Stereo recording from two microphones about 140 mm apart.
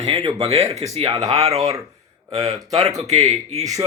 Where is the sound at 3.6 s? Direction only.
25° right (ahead or behind).